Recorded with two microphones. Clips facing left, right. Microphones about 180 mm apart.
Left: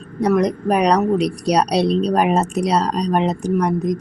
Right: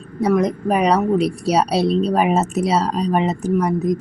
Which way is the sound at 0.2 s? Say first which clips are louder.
Even; 5° right (ahead or behind).